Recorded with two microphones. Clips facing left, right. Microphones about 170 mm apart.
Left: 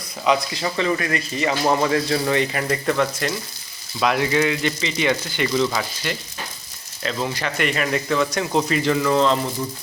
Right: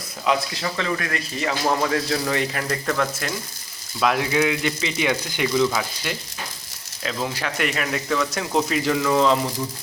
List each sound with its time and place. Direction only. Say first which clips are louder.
0.3 s speech: left 2 dB; centre (ahead or behind)